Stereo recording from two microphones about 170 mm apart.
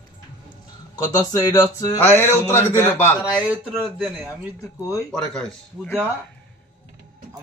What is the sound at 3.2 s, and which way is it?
Speech, 5° right (ahead or behind).